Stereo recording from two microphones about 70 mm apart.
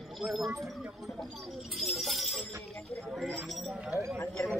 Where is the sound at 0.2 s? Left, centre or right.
Centre.